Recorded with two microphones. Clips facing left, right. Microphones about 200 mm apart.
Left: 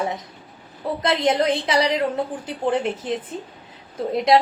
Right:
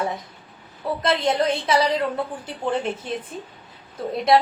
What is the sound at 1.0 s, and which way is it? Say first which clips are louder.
A woman's voice: left 2 dB; 20° left (ahead or behind).